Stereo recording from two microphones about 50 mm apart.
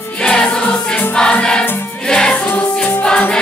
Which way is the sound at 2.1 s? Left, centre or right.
Centre.